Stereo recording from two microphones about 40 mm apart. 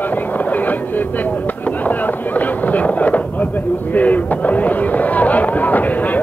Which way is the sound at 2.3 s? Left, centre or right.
Left.